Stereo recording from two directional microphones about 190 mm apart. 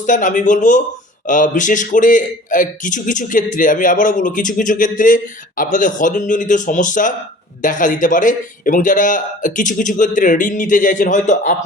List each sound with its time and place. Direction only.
0.0 s a man's voice: 40° left (ahead or behind)